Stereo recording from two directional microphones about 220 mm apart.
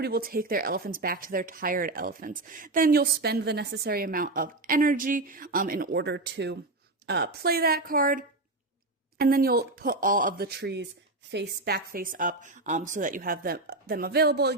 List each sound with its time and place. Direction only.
0.0 s speech: 45° right (ahead or behind)